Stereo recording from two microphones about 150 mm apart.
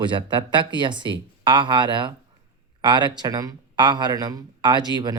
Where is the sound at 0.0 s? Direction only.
35° right (ahead or behind).